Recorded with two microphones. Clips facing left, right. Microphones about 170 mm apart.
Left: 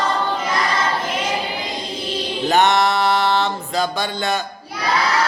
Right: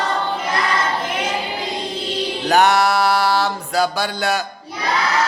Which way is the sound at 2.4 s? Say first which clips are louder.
Right 1 dB; centre (ahead or behind).